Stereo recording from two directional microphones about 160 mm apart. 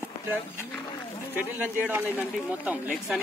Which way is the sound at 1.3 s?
10° right (ahead or behind).